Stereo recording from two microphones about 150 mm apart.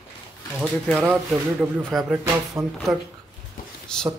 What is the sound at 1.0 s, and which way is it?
Speech, 10° right (ahead or behind).